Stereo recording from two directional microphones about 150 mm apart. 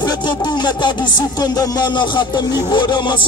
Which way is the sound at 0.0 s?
30° left (ahead or behind).